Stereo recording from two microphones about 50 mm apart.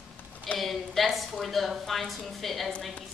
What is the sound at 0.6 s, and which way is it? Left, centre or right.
A woman's voice, centre.